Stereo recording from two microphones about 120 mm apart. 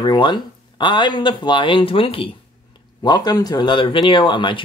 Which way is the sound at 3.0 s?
35° left (ahead or behind).